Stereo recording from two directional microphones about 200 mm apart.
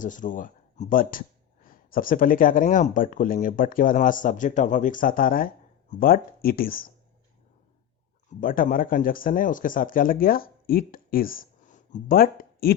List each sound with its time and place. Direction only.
0.0 s speech: 40° left (ahead or behind)
8.4 s speech: 45° left (ahead or behind)